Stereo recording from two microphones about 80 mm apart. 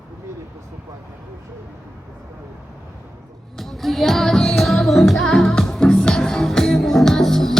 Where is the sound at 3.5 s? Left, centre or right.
Centre.